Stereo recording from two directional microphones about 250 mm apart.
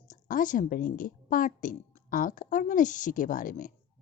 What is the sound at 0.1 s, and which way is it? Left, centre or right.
A woman's voice, left.